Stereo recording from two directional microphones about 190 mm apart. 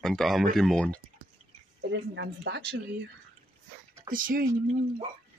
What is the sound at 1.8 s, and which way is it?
Speech, 70° right (ahead or behind).